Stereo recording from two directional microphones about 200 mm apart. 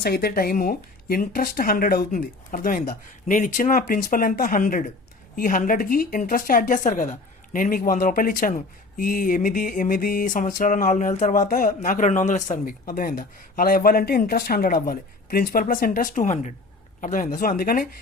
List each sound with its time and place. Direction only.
0.0 s speech: 50° left (ahead or behind)